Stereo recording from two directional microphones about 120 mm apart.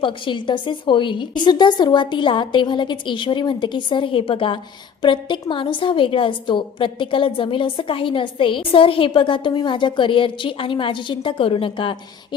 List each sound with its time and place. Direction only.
0.0 s a woman's voice: 40° left (ahead or behind)